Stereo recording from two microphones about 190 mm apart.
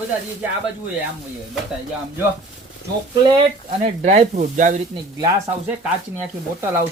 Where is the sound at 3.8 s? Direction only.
35° right (ahead or behind).